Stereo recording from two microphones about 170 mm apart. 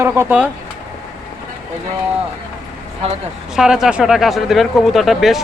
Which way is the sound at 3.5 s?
5° right (ahead or behind).